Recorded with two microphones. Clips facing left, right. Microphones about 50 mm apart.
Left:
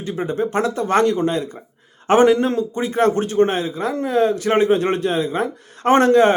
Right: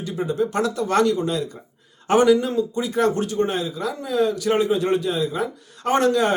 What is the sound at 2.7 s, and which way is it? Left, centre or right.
Speech, left.